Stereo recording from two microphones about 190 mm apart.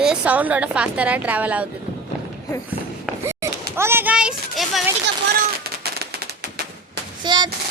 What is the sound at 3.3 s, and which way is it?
Speech, 15° right (ahead or behind).